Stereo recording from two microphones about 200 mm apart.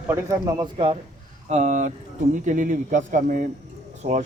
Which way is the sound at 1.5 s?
40° right (ahead or behind).